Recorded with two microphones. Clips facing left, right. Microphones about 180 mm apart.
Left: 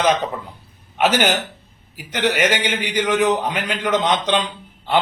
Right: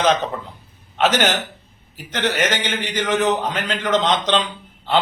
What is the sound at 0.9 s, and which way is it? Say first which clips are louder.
A man's voice: left 1 dB; 10° left (ahead or behind).